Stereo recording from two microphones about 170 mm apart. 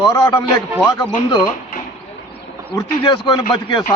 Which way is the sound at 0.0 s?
25° left (ahead or behind).